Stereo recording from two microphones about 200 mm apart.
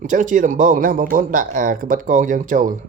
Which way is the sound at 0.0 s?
40° right (ahead or behind).